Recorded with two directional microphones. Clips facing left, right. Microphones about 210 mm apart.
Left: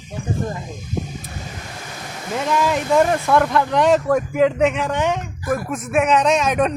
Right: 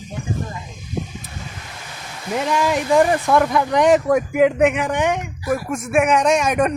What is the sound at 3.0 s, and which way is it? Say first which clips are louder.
Speech: even; 15° right (ahead or behind).